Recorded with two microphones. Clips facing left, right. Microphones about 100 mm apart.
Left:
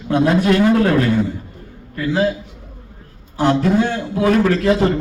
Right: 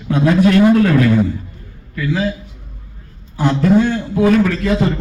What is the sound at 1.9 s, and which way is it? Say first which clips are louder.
Speech: left 1 dB; 35° left (ahead or behind).